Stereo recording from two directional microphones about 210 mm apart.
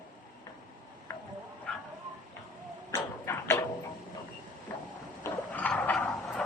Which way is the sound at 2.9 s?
10° left (ahead or behind).